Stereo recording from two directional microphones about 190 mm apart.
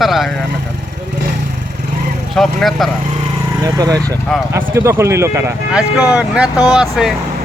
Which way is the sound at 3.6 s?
20° right (ahead or behind).